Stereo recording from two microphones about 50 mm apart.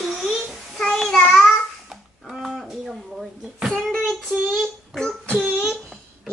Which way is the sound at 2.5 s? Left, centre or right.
Centre.